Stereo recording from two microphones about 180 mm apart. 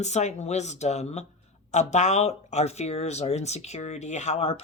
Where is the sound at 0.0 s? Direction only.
40° left (ahead or behind).